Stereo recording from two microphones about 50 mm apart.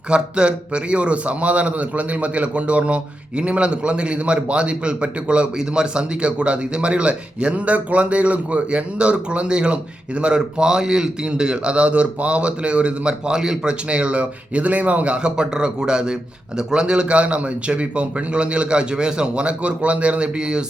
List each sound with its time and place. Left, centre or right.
0.1 s a man's voice: centre